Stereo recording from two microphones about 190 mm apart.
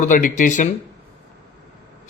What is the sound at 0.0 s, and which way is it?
Speech, 40° left (ahead or behind).